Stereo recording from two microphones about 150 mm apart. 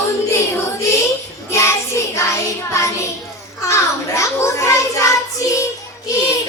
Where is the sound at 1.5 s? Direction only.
20° left (ahead or behind).